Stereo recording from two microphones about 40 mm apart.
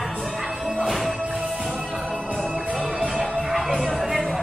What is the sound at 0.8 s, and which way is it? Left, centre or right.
Music, centre.